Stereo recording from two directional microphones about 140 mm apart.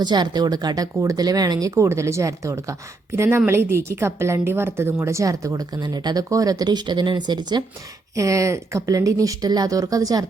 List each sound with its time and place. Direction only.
0.0 s speech: 30° right (ahead or behind)